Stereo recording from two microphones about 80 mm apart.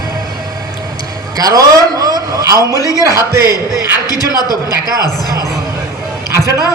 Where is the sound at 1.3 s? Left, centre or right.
Right.